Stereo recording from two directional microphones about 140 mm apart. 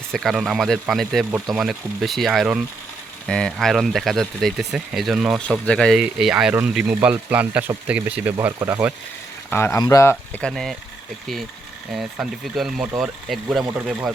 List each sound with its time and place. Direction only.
0.1 s speech: centre (ahead or behind); by 8.7 s 15° right (ahead or behind)
9.5 s speech: 15° left (ahead or behind)
10.4 s speech: centre (ahead or behind)
11.9 s speech: 5° right (ahead or behind)